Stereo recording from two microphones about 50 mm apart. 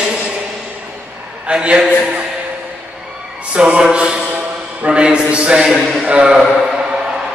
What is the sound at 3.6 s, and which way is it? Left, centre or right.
A man's voice, centre.